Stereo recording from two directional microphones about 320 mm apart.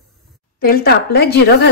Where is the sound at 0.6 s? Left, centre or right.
Left.